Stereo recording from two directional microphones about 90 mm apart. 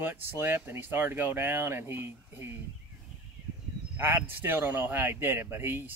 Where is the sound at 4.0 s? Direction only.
25° right (ahead or behind).